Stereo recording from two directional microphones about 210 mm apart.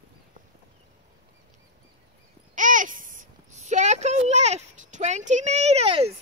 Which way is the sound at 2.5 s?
40° right (ahead or behind).